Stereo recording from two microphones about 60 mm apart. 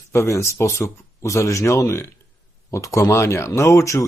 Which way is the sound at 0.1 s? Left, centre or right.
Left.